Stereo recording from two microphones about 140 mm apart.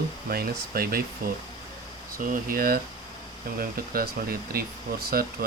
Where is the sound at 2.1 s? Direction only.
85° right.